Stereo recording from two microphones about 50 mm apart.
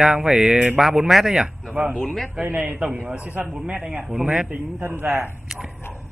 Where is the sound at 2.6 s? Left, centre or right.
Right.